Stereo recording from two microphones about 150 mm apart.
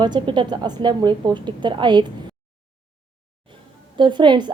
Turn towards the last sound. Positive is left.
turn(degrees=-30)  # may be behind; listen again after turning